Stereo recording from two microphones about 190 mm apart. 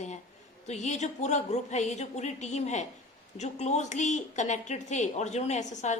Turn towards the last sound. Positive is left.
turn(degrees=40)  # may be behind; listen again after turning